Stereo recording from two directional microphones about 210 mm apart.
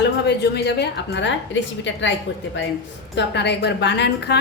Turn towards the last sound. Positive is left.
turn(degrees=55)  # may be behind; listen again after turning